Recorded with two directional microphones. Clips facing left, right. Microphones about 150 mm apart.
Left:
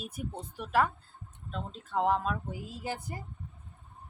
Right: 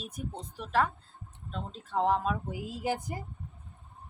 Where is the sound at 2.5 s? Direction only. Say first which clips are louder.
Right 5 dB; 15° right (ahead or behind).